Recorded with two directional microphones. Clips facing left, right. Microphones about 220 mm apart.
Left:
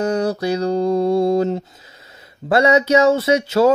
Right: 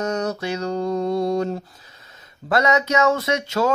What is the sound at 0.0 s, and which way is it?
Mantra, 30° left (ahead or behind).